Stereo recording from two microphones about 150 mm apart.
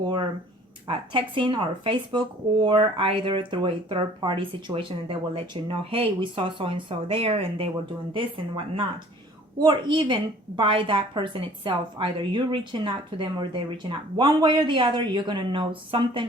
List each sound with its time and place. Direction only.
0.0 s a woman's voice: 30° right (ahead or behind)